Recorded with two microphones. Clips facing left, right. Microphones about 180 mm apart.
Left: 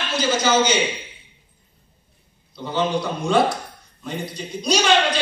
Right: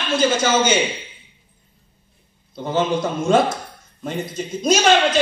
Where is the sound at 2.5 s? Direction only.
45° right (ahead or behind).